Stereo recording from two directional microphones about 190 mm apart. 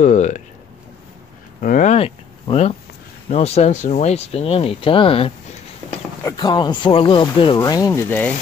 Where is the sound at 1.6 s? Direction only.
45° left (ahead or behind); by 8.3 s 10° left (ahead or behind).